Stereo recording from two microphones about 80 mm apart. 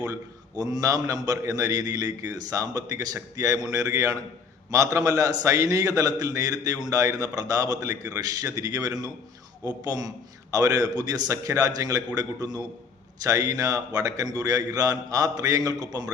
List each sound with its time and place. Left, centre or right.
0.5 s a man's voice: right